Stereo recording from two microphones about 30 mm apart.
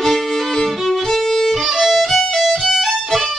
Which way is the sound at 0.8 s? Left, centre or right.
Centre.